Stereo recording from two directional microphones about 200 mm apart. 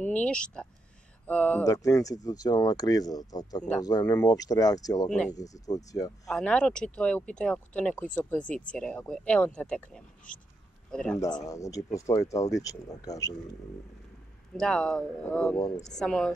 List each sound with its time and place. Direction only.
0.0 s speech: 5° left (ahead or behind)
1.7 s speech: 15° left (ahead or behind)
5.0 s speech: 5° left (ahead or behind)
5.3 s speech: 15° left (ahead or behind)
6.2 s a man's voice: 5° left (ahead or behind)
11.1 s speech: 20° left (ahead or behind)
14.6 s speech: 5° left (ahead or behind)